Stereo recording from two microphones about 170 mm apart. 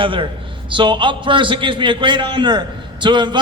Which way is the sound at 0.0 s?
30° right (ahead or behind).